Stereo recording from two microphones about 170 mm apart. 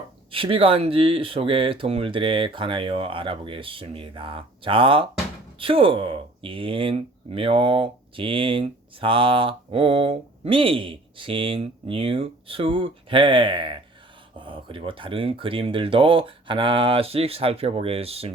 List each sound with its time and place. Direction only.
0.3 s speech: 30° right (ahead or behind)